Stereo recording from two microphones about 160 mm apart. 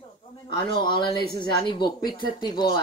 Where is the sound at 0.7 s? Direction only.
30° left (ahead or behind).